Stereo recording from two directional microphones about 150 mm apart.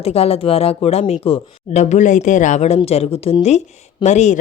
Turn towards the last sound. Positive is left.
turn(degrees=50)  # may be behind; listen again after turning